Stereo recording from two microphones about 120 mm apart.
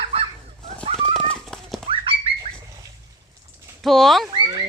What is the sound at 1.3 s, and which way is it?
Horse, 5° left (ahead or behind).